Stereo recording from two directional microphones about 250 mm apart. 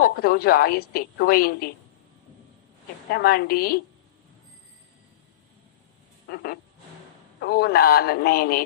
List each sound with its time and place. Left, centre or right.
0.0 s a woman's voice: left
3.1 s a woman's voice: left
6.2 s a sound: left
7.3 s a woman's voice: left